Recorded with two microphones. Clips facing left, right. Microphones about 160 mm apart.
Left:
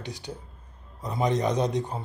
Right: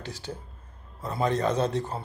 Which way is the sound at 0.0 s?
15° left (ahead or behind).